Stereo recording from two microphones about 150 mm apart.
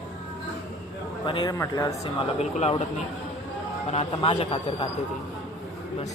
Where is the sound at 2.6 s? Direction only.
45° left (ahead or behind).